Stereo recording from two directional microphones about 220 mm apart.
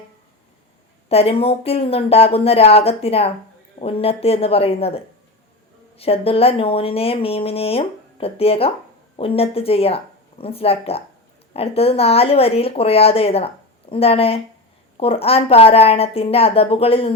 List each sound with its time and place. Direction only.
1.0 s speech: 25° left (ahead or behind)